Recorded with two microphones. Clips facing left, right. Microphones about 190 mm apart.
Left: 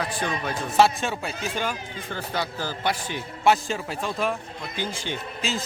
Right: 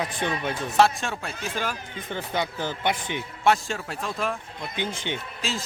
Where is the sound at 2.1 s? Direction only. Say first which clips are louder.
Right 1 dB; 20° right (ahead or behind).